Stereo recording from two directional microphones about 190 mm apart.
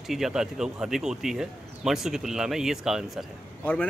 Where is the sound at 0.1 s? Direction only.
Centre (ahead or behind).